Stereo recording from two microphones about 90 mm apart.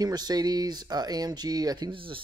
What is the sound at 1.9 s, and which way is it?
Speech, 80° right.